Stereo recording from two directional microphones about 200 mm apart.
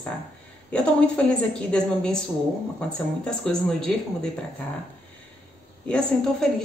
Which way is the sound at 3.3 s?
5° left (ahead or behind).